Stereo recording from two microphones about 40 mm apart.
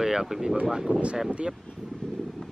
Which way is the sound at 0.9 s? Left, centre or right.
Right.